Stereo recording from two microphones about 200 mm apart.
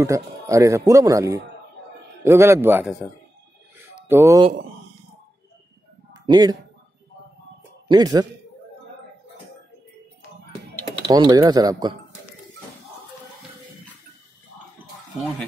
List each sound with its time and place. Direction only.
0.0 s speech: 15° right (ahead or behind)
4.1 s speech: 15° right (ahead or behind)
6.1 s a man's voice: 20° right (ahead or behind)
7.9 s speech: 20° right (ahead or behind)
11.1 s speech: 20° right (ahead or behind)